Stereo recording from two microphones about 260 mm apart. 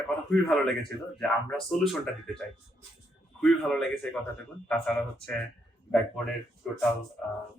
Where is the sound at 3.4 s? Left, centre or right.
Centre.